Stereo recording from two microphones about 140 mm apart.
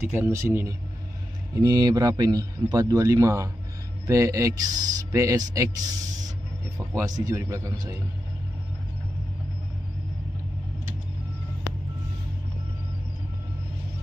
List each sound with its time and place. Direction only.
0.1 s speech: 20° right (ahead or behind)